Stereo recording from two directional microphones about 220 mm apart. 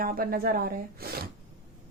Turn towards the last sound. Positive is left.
turn(degrees=-45)  # may be behind; listen again after turning